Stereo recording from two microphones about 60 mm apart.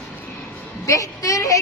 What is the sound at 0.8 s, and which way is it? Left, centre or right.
Speech, left.